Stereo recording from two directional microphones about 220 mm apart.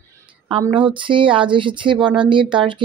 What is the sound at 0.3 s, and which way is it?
Speech, 20° right (ahead or behind).